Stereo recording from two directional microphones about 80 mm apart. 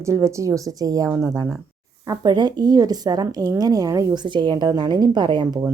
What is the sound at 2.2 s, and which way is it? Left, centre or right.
A woman's voice, right.